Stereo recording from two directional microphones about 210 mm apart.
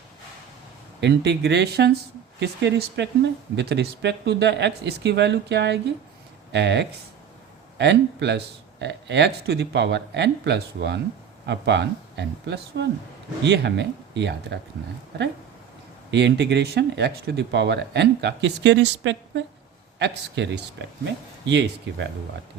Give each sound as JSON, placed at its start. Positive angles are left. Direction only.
{"t": 1.0, "sound": "speech", "side_deg": -55}
{"t": 16.1, "sound": "speech", "side_deg": -55}